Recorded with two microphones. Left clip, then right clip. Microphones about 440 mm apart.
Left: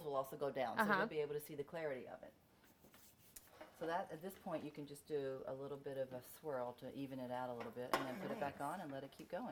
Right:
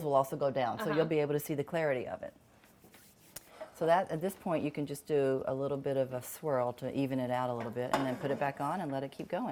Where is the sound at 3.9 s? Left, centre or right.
Right.